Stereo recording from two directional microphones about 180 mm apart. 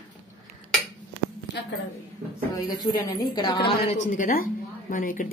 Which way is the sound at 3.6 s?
35° left (ahead or behind).